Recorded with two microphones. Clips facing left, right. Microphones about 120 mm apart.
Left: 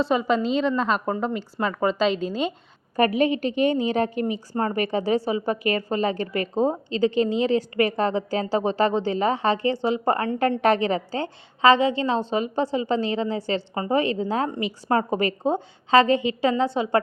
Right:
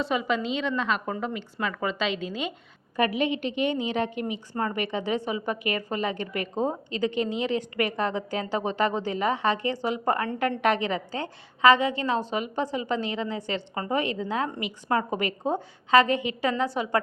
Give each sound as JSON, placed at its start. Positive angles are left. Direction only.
{"t": 0.0, "sound": "a woman's voice", "side_deg": 35}